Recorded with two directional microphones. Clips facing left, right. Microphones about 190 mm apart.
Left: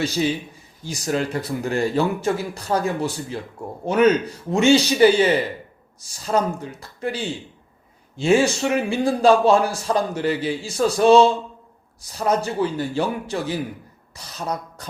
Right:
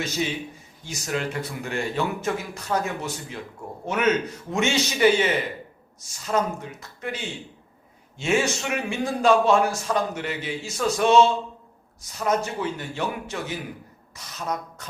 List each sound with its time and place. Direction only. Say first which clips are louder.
0.9 s a man's voice: left 5 dB; 35° left (ahead or behind)